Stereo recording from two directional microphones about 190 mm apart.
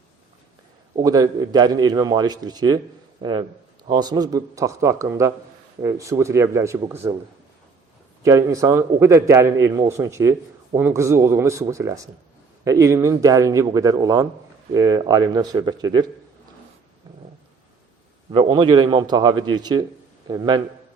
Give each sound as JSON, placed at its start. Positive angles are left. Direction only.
{"t": 0.9, "sound": "a man's voice", "side_deg": -20}
{"t": 8.2, "sound": "a man's voice", "side_deg": -15}
{"t": 18.3, "sound": "a man's voice", "side_deg": -30}